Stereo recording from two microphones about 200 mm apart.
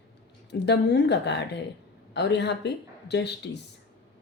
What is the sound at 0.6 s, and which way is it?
Speech, 60° left (ahead or behind).